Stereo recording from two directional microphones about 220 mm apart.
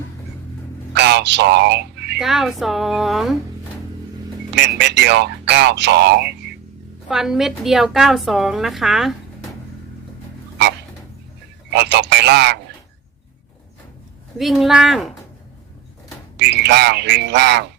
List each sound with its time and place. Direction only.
0.9 s a sound: 50° right (ahead or behind)
2.1 s a woman's voice: centre (ahead or behind)
4.5 s speech: 50° right (ahead or behind)
7.1 s a woman's voice: centre (ahead or behind)
11.7 s speech: 50° right (ahead or behind)
14.3 s a woman's voice: centre (ahead or behind)
16.5 s speech: 50° right (ahead or behind)